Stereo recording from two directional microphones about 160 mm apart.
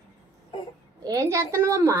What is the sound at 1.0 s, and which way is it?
Speech, 20° right (ahead or behind).